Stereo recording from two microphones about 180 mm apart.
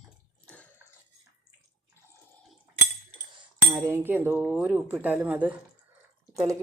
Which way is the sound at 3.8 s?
10° right (ahead or behind).